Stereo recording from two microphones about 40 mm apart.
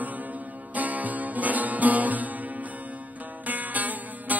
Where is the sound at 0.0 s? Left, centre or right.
Right.